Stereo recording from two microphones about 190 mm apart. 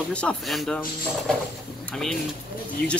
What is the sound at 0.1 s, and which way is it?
Speech, 5° left (ahead or behind).